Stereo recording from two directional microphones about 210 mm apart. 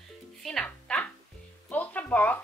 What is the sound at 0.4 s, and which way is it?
Music, 5° left (ahead or behind).